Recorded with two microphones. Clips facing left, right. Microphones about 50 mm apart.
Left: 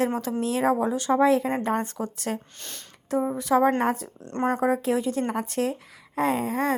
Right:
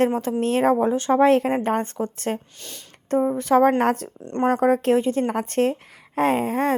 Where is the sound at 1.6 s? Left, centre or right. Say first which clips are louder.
Right 3 dB; right.